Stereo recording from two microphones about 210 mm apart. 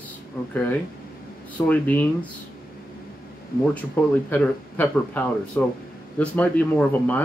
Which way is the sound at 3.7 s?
10° left (ahead or behind).